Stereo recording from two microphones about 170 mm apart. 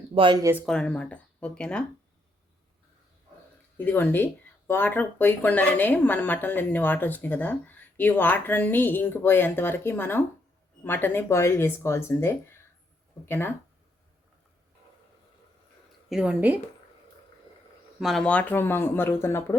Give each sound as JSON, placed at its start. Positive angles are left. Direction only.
{"t": 0.1, "sound": "speech", "side_deg": -30}
{"t": 0.6, "sound": "speech", "side_deg": 5}
{"t": 3.8, "sound": "speech", "side_deg": 10}
{"t": 16.0, "sound": "speech", "side_deg": -5}
{"t": 18.0, "sound": "speech", "side_deg": 0}